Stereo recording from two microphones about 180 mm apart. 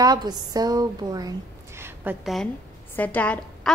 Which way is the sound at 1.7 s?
15° right (ahead or behind).